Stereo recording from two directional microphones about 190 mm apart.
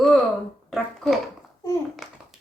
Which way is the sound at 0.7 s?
Centre (ahead or behind).